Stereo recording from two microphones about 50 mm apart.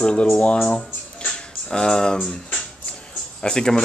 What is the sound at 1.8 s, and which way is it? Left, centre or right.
Speech, centre.